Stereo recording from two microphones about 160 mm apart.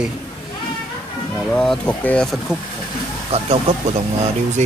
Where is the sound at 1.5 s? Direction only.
5° left (ahead or behind).